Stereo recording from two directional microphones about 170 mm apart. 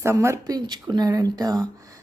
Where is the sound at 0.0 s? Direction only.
15° right (ahead or behind).